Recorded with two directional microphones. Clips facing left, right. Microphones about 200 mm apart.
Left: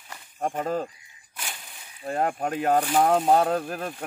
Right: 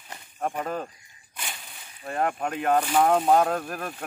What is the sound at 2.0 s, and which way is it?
Speech, 30° left (ahead or behind).